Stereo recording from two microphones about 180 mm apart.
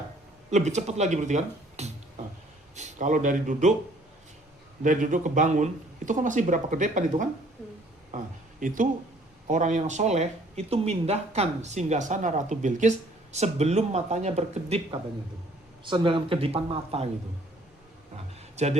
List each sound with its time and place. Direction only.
0.5 s a man's voice: 40° right (ahead or behind)
4.8 s speech: 45° right (ahead or behind)
8.1 s speech: 45° right (ahead or behind)
15.8 s speech: 25° right (ahead or behind)
18.5 s speech: 40° right (ahead or behind)